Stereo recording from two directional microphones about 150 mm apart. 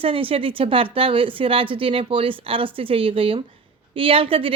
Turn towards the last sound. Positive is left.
turn(degrees=-35)  # may be behind; listen again after turning